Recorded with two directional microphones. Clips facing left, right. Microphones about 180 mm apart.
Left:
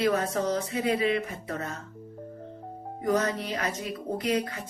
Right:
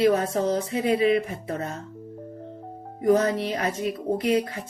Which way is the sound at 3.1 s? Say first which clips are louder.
Right 6 dB; 35° right (ahead or behind).